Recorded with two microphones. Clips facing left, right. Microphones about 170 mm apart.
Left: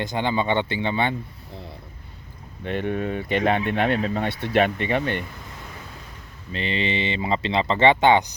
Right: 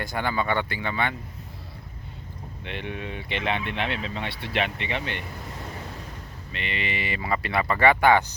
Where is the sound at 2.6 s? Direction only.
45° left (ahead or behind).